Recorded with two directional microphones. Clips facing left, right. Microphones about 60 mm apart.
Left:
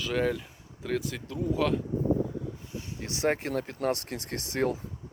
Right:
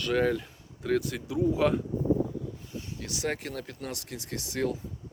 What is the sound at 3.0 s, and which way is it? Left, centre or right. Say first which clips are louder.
Speech: left 5 dB; left.